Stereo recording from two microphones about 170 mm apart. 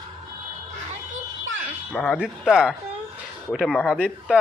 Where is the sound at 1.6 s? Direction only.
Centre (ahead or behind).